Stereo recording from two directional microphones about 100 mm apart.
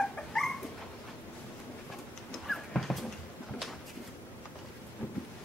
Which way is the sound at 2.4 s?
Centre (ahead or behind).